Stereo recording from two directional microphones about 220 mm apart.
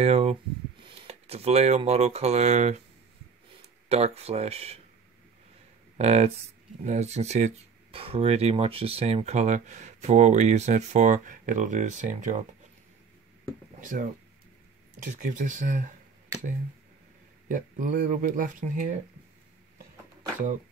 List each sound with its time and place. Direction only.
0.0 s speech: 30° right (ahead or behind)
3.9 s speech: 30° right (ahead or behind)
5.9 s speech: 30° right (ahead or behind)
13.7 s speech: 35° right (ahead or behind)
17.5 s speech: 40° right (ahead or behind)